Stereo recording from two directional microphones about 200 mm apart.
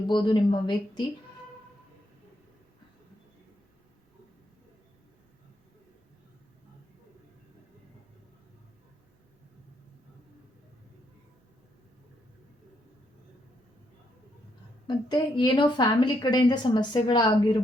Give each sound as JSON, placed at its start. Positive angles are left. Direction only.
{"t": 0.1, "sound": "a woman's voice", "side_deg": 20}
{"t": 14.8, "sound": "a woman's voice", "side_deg": 20}